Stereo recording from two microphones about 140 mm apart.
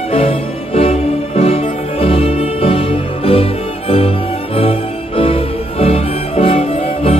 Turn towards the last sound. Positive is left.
turn(degrees=45)  # may be behind; listen again after turning